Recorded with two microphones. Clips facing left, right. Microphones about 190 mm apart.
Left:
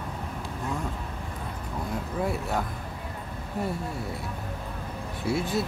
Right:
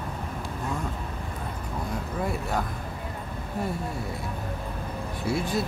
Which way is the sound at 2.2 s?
Centre (ahead or behind).